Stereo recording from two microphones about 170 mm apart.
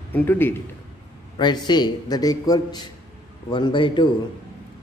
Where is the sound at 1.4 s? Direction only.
25° left (ahead or behind).